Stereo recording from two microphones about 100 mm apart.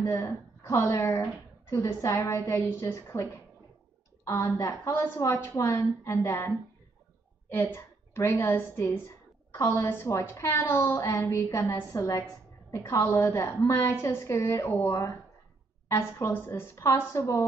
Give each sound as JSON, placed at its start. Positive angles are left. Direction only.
{"t": 0.0, "sound": "a woman's voice", "side_deg": 25}
{"t": 7.5, "sound": "a woman's voice", "side_deg": 25}